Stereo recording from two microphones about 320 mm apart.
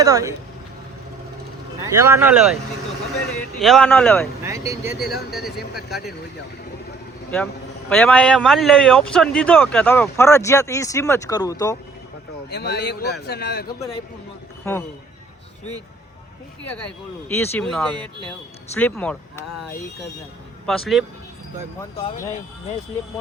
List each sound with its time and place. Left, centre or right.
0.0 s speech: centre
1.8 s speech: centre
3.6 s a man's voice: centre
4.4 s a man's voice: centre
7.9 s a man's voice: centre
12.5 s a man's voice: left
14.6 s a man's voice: centre
16.7 s a man's voice: centre
20.7 s a man's voice: centre